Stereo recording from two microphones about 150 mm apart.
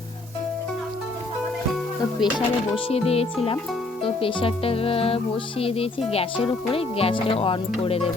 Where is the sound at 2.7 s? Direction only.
40° left (ahead or behind).